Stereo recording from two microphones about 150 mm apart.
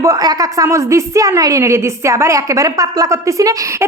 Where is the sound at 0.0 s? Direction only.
25° right (ahead or behind).